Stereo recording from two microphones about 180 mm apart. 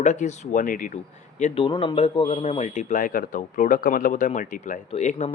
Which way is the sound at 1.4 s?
30° left (ahead or behind).